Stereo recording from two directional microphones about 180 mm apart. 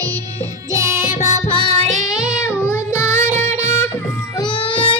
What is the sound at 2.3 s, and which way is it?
Child singing, 15° left (ahead or behind).